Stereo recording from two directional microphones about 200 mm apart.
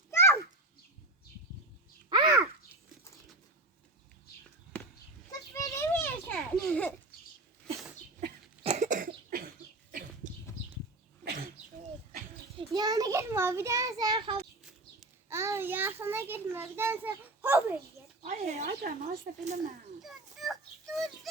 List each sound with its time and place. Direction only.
0.1 s children playing: 10° left (ahead or behind)
2.0 s babbling: 20° right (ahead or behind)
5.5 s children playing: 15° left (ahead or behind)
6.7 s a sound: 5° left (ahead or behind)
8.6 s cough: 35° right (ahead or behind)
12.5 s child singing: 20° right (ahead or behind)
15.3 s a child's voice: 15° right (ahead or behind)
18.2 s speech: 35° right (ahead or behind)
20.0 s a sound: centre (ahead or behind)